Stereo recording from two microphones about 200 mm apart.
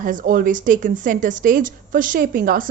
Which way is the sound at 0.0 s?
40° right (ahead or behind).